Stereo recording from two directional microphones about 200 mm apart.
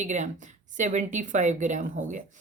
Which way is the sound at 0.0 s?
35° right (ahead or behind).